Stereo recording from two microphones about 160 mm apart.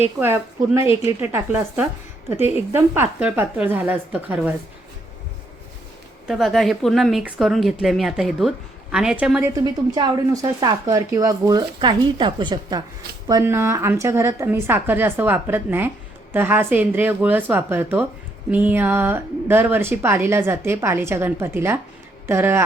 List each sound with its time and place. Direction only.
0.2 s a woman's voice: 15° right (ahead or behind)
6.2 s speech: centre (ahead or behind)
9.6 s a woman's voice: 25° right (ahead or behind)
13.2 s a woman's voice: 20° right (ahead or behind)